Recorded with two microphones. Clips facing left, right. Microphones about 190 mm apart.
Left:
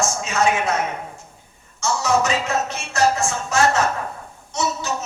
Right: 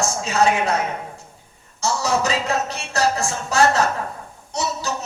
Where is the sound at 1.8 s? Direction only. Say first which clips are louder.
Left 1 dB; 35° right (ahead or behind).